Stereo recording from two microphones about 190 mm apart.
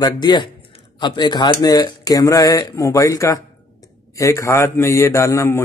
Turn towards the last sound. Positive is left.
turn(degrees=15)  # may be behind; listen again after turning